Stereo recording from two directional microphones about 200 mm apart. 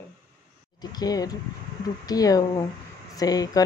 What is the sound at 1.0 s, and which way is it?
Speech, 20° left (ahead or behind).